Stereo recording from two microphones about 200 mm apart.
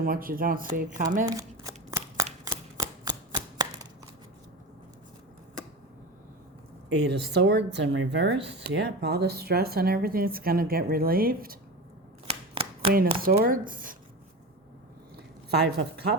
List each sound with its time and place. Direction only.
0.0 s speech: 45° right (ahead or behind)
1.2 s shuffling cards: 15° right (ahead or behind)
2.4 s a sound: 20° right (ahead or behind)
7.1 s speech: 60° right (ahead or behind)
12.3 s shuffling cards: 30° right (ahead or behind)
13.4 s speech: 45° right (ahead or behind)
15.4 s speech: 55° right (ahead or behind)